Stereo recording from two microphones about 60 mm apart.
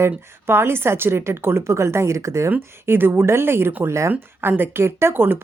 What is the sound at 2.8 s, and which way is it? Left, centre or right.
Speech, right.